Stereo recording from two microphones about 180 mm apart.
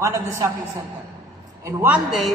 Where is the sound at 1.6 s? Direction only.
10° right (ahead or behind).